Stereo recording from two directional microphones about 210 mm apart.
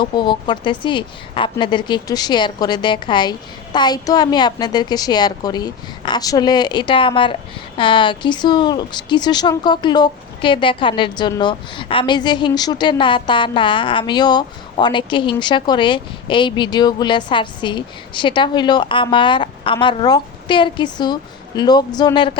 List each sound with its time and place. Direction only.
0.0 s a woman's voice: 20° left (ahead or behind)